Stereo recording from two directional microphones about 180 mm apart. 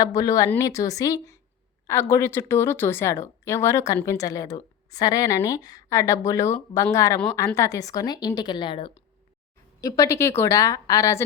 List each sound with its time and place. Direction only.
0.0 s a woman's voice: 20° left (ahead or behind)